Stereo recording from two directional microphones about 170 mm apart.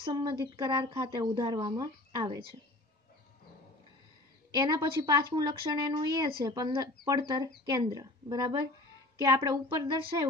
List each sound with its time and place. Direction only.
0.0 s speech: 25° right (ahead or behind)
4.6 s speech: 25° right (ahead or behind)